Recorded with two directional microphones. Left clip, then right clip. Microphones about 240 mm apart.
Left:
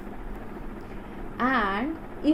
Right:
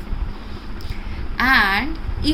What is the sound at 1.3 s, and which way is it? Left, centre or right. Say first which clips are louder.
Speech: right 9 dB; right.